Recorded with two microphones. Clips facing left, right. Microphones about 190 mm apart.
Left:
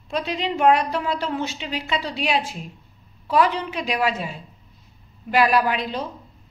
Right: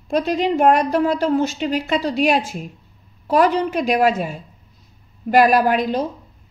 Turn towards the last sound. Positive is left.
turn(degrees=-45)  # may be behind; listen again after turning